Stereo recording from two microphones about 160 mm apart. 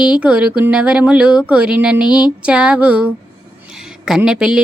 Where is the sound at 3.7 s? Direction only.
5° right (ahead or behind).